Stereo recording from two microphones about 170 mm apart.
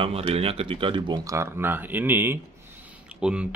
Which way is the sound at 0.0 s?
35° right (ahead or behind).